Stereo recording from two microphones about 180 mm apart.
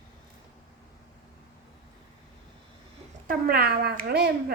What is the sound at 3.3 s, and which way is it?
Speech, 60° right (ahead or behind).